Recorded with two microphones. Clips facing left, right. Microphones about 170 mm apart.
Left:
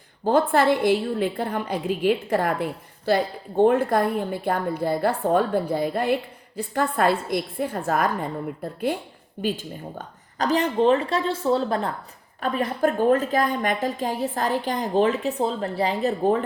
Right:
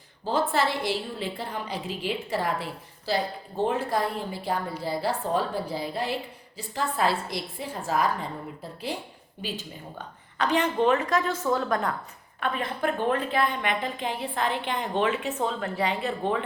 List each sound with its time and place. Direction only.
0.3 s a woman's voice: 55° left (ahead or behind)
10.3 s a woman's voice: 35° left (ahead or behind)